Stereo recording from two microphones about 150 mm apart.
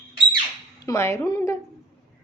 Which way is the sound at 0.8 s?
20° left (ahead or behind).